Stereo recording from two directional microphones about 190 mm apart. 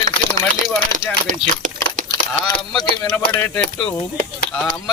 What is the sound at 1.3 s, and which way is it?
Crumpling, 45° right (ahead or behind).